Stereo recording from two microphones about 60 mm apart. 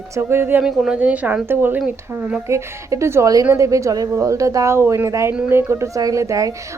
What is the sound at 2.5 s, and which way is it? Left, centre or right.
A woman's voice, right.